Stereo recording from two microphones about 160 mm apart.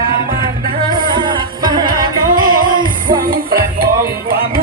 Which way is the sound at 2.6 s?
60° right (ahead or behind).